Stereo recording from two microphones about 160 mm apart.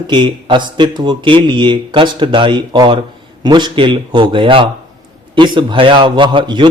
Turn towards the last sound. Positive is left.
turn(degrees=-30)  # may be behind; listen again after turning